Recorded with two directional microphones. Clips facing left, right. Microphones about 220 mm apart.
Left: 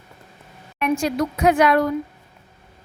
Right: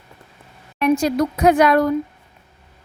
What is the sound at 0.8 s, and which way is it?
A woman's voice, 35° right (ahead or behind).